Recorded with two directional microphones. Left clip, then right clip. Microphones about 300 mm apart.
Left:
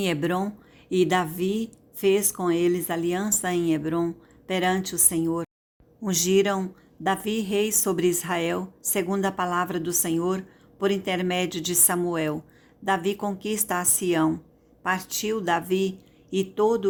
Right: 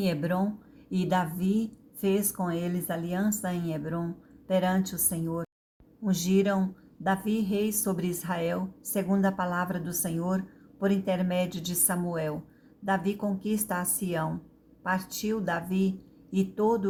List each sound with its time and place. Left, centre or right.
0.0 s a woman's voice: left